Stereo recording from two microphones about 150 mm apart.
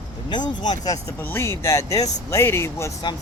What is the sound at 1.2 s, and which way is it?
Speech, 15° left (ahead or behind).